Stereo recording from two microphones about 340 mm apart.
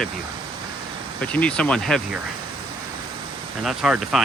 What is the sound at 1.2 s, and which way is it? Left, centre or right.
Speech, centre.